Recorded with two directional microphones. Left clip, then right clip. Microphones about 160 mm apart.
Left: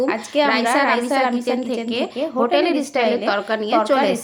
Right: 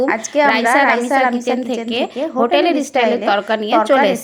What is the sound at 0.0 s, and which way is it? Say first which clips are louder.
A woman's voice: right 4 dB; 15° right (ahead or behind).